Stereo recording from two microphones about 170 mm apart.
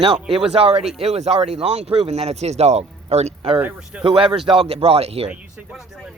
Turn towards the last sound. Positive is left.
turn(degrees=-5)  # may be behind; listen again after turning